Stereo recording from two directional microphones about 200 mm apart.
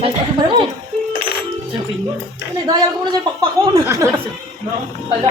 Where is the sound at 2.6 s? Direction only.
20° right (ahead or behind).